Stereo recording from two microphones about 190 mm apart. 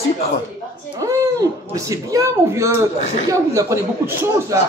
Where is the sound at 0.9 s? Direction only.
15° right (ahead or behind).